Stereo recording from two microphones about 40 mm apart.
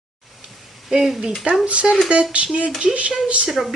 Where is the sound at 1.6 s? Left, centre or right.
Right.